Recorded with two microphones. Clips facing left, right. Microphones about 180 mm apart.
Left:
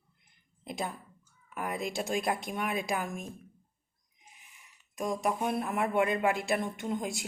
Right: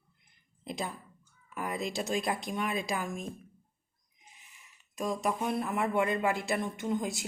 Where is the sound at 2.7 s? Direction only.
55° left (ahead or behind).